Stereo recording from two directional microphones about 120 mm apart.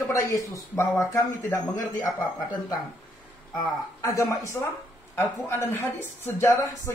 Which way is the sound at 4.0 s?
25° left (ahead or behind).